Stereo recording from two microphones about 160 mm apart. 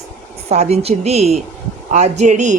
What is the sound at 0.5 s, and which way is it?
A woman's voice, 45° right (ahead or behind).